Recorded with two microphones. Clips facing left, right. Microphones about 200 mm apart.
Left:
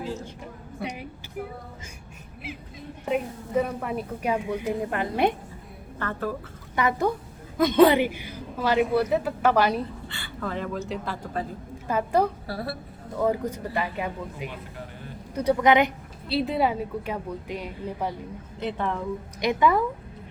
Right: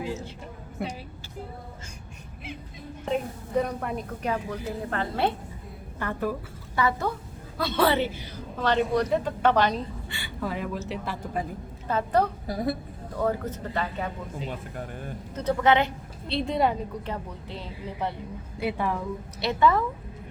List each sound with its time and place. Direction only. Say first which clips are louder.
3.1 s a woman's voice: left 1 dB; 5° left (ahead or behind)
6.0 s a woman's voice: right 1 dB; 15° right (ahead or behind)
6.7 s a woman's voice: left 2 dB; 20° left (ahead or behind)
10.2 s a sound: even; 10° right (ahead or behind)
10.8 s speech: left 1 dB; 5° right (ahead or behind)
11.9 s a woman's voice: left 1 dB; 10° left (ahead or behind)
12.5 s a woman's voice: right 4 dB; 20° right (ahead or behind)
13.1 s a woman's voice: left 2 dB; 10° left (ahead or behind)
16.3 s a woman's voice: left 1 dB; 5° left (ahead or behind)
18.6 s a woman's voice: right 1 dB; 10° right (ahead or behind)
19.4 s a woman's voice: left 1 dB; 15° left (ahead or behind)